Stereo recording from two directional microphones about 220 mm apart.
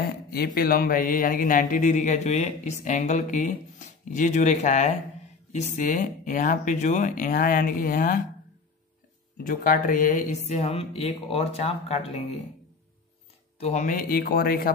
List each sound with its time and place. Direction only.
0.6 s speech: 40° left (ahead or behind)
9.4 s speech: 40° left (ahead or behind)
13.6 s speech: 30° left (ahead or behind)